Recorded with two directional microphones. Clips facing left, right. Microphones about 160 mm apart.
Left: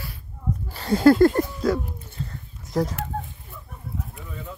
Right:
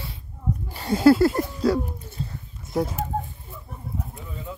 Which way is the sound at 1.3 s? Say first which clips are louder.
Even; 35° right (ahead or behind).